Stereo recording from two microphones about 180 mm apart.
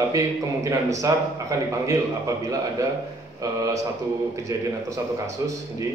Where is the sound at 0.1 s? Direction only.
15° right (ahead or behind).